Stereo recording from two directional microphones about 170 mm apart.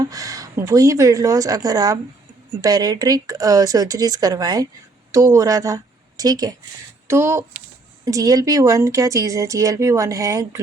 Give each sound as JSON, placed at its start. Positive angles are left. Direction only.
{"t": 0.0, "sound": "a woman's voice", "side_deg": -20}